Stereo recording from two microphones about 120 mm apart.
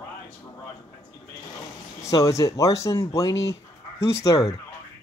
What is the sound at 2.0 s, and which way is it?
Speech, 30° left (ahead or behind).